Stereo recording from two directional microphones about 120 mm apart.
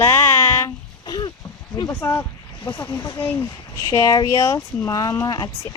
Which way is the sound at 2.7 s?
40° left (ahead or behind).